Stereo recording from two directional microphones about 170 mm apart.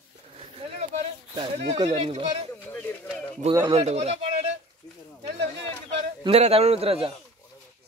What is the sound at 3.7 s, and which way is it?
Speech, 40° right (ahead or behind).